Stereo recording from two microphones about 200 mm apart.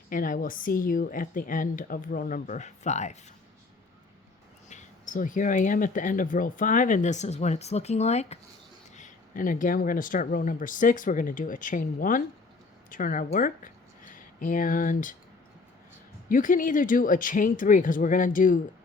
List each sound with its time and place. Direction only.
0.1 s speech: 45° left (ahead or behind)
4.7 s speech: 40° left (ahead or behind)
16.3 s speech: 40° left (ahead or behind)